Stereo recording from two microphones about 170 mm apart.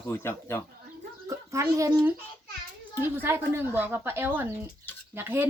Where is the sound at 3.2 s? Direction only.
15° right (ahead or behind).